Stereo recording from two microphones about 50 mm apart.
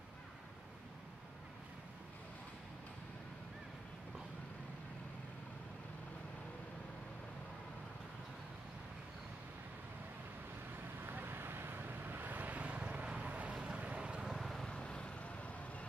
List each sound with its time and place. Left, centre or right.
11.1 s vehicle: right; by 14.3 s centre
14.3 s vehicle: centre
14.7 s vehicle: centre